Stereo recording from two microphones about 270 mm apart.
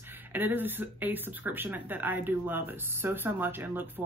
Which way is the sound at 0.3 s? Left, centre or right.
Centre.